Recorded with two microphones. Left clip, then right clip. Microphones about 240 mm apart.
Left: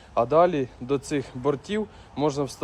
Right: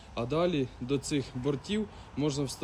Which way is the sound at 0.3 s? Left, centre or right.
Centre.